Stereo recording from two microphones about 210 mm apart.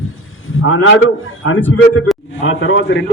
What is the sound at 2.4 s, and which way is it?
Speech, 65° left (ahead or behind).